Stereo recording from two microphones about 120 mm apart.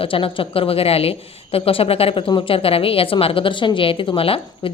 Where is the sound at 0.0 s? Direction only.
45° left (ahead or behind).